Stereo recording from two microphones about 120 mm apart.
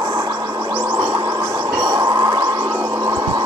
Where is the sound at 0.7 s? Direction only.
15° right (ahead or behind).